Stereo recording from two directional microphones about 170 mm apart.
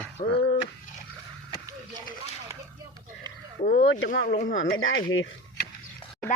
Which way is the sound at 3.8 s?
90° left.